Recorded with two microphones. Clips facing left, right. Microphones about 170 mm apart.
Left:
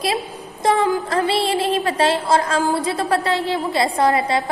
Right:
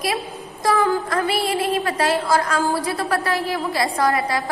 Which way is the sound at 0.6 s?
20° left (ahead or behind).